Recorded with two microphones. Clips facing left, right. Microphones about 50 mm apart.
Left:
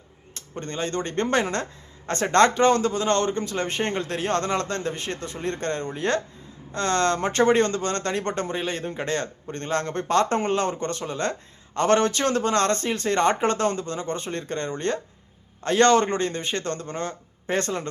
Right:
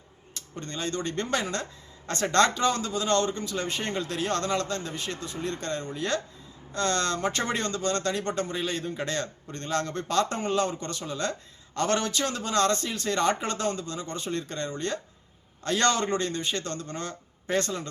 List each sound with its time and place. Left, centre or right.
0.3 s speech: left